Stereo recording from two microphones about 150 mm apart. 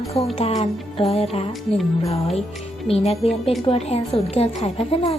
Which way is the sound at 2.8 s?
40° left (ahead or behind).